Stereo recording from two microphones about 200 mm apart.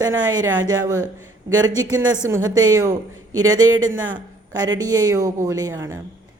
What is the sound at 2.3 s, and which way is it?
Speech, 15° right (ahead or behind).